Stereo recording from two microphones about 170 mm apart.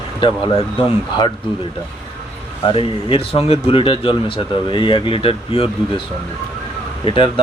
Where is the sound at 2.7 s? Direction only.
30° left (ahead or behind).